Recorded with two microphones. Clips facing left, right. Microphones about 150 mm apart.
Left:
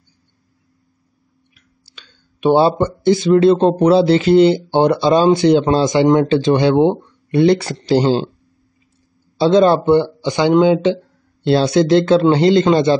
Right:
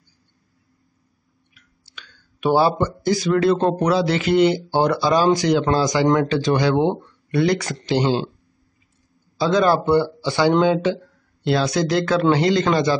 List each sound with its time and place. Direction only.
1.5 s speech: 30° left (ahead or behind)
9.4 s speech: 30° left (ahead or behind)